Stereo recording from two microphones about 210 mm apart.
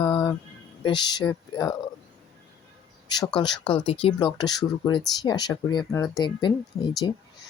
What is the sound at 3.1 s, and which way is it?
Speech, 20° left (ahead or behind).